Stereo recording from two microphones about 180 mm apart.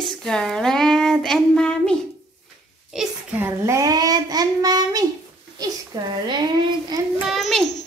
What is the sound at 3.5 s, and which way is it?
A child's voice, 15° right (ahead or behind).